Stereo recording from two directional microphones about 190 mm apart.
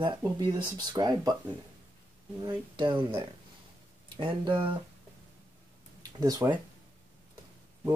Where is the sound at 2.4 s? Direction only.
25° right (ahead or behind).